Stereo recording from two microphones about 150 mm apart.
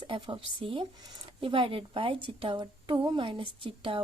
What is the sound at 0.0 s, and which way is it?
A woman's voice, 35° right (ahead or behind).